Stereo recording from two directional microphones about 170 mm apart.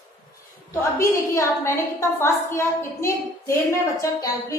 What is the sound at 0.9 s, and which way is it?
A woman's voice, 15° left (ahead or behind).